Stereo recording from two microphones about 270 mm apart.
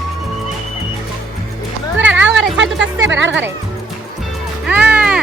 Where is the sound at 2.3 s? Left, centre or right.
Right.